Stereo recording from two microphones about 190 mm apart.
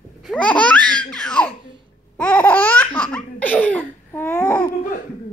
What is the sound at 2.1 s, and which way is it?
Laughter, 5° left (ahead or behind).